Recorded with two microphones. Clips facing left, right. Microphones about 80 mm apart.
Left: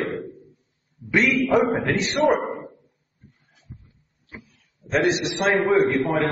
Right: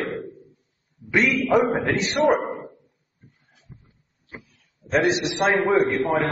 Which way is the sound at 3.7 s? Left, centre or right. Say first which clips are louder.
Left 4 dB; centre.